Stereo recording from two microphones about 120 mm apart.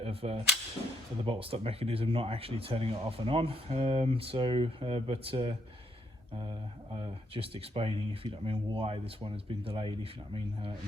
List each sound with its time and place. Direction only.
0.0 s whip: 55° right (ahead or behind)
1.2 s speech: 50° right (ahead or behind)
6.3 s speech: 40° right (ahead or behind)
7.1 s speech: 50° right (ahead or behind)